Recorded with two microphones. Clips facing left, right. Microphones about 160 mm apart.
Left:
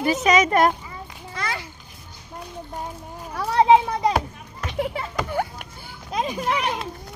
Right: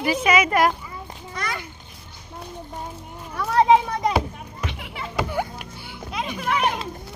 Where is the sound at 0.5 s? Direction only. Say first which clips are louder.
Left 1 dB; 25° left (ahead or behind).